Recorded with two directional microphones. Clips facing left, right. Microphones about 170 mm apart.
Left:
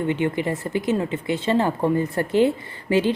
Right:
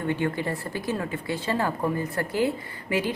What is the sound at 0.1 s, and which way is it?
A woman's voice, 20° left (ahead or behind).